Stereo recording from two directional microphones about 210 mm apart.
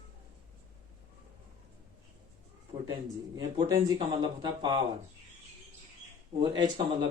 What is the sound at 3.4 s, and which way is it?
Speech, 20° right (ahead or behind).